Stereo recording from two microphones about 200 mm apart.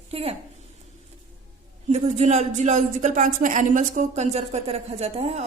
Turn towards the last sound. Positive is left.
turn(degrees=-30)  # may be behind; listen again after turning